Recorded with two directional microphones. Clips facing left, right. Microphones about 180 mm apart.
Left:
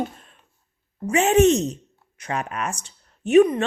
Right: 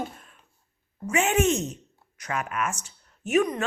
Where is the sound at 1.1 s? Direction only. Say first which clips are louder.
Left 7 dB; 35° left (ahead or behind).